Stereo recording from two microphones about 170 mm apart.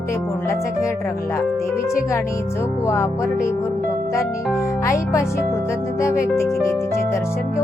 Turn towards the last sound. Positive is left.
turn(degrees=15)  # may be behind; listen again after turning